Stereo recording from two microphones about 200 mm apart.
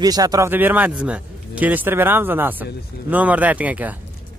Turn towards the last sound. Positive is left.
turn(degrees=-10)  # may be behind; listen again after turning